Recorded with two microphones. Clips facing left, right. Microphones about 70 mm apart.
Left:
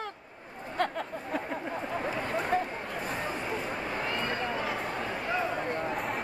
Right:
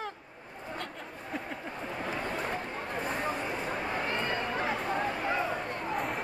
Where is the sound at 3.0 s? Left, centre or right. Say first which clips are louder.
Right 2 dB; centre.